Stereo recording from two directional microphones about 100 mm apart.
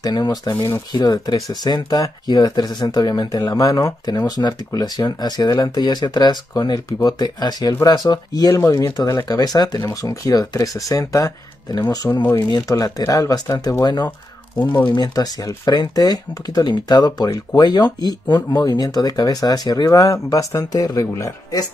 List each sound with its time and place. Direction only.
0.0 s speech: 40° left (ahead or behind)